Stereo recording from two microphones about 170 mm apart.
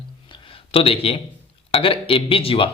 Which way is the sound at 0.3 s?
30° left (ahead or behind).